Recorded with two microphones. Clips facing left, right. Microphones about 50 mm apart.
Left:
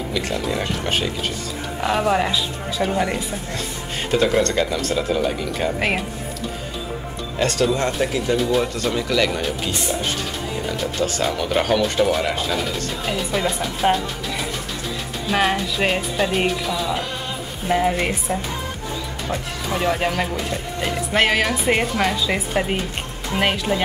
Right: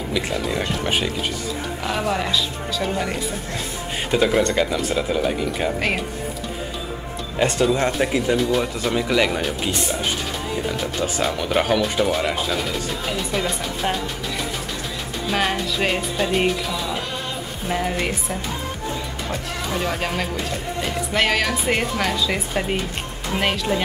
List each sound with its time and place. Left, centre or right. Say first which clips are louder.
0.1 s speech: right 1 dB; centre
1.8 s a woman's voice: left 5 dB; centre
4.1 s speech: even; centre
7.3 s speech: right 1 dB; right
8.4 s speech: left 1 dB; centre
10.7 s speech: left 1 dB; centre
15.2 s a woman's voice: left 2 dB; centre